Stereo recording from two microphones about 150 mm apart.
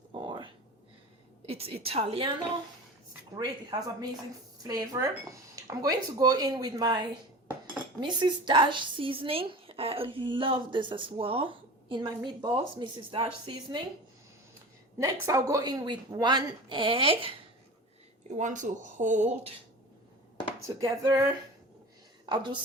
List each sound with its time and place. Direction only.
0.1 s a sound: 30° right (ahead or behind)
1.5 s a woman's voice: 40° right (ahead or behind)
3.3 s a woman's voice: 25° right (ahead or behind)
14.9 s speech: 20° right (ahead or behind)
18.3 s speech: 55° right (ahead or behind)
20.7 s speech: 25° right (ahead or behind)
22.3 s a woman's voice: 30° right (ahead or behind)